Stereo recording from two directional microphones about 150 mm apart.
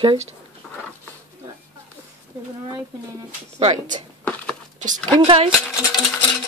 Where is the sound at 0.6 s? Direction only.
5° left (ahead or behind).